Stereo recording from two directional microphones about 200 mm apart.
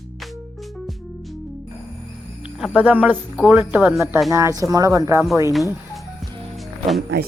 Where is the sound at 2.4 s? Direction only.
5° right (ahead or behind).